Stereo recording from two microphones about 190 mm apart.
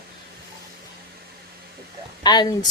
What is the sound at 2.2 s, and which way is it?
Speech, 20° left (ahead or behind).